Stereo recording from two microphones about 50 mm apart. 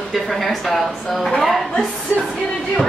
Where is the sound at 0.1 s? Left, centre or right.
Centre.